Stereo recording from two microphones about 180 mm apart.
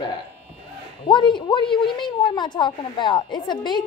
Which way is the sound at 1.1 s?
25° left (ahead or behind).